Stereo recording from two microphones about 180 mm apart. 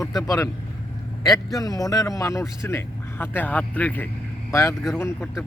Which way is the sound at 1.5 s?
20° left (ahead or behind).